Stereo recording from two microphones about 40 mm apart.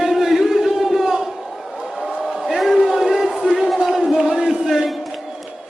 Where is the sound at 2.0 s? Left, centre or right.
Centre.